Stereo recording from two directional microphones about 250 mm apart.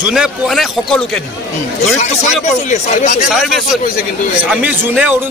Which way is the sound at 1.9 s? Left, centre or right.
Left.